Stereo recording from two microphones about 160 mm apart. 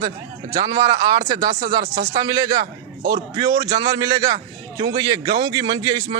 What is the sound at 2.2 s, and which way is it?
A man's voice, 25° right (ahead or behind).